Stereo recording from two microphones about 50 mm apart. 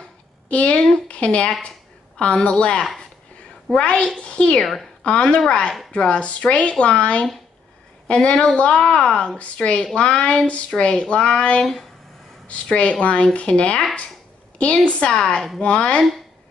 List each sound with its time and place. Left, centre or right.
0.5 s speech: left
3.8 s a woman's voice: left
14.9 s speech: left
15.1 s a woman's voice: centre